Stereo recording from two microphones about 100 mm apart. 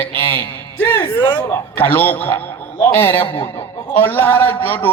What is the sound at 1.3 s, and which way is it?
A man's voice, 20° left (ahead or behind).